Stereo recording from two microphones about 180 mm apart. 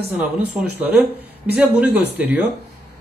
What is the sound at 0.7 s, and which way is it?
Speech, 10° right (ahead or behind).